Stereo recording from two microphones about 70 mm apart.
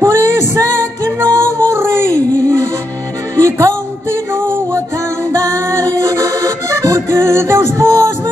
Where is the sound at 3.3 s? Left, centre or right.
Right.